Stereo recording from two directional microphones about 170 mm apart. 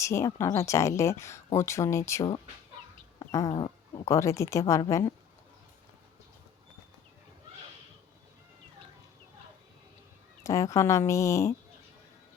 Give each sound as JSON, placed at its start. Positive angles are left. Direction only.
{"t": 0.0, "sound": "speech", "side_deg": 15}
{"t": 3.2, "sound": "cat", "side_deg": 20}
{"t": 3.5, "sound": "speech", "side_deg": 30}
{"t": 4.0, "sound": "speech", "side_deg": 20}
{"t": 10.4, "sound": "speech", "side_deg": 20}